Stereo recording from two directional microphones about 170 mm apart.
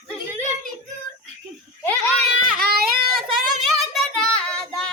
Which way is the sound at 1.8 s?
10° left (ahead or behind).